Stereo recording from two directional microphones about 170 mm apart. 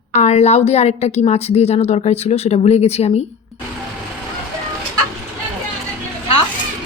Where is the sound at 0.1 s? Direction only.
45° left (ahead or behind).